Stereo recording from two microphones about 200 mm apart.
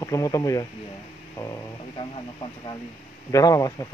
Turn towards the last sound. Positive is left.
turn(degrees=15)  # may be behind; listen again after turning